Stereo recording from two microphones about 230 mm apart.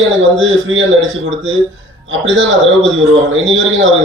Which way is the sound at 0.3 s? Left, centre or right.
Right.